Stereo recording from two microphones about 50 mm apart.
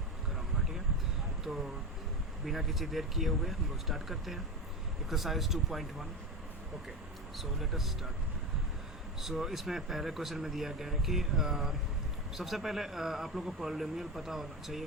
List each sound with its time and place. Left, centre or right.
1.5 s speech: centre
7.3 s speech: centre
9.2 s speech: centre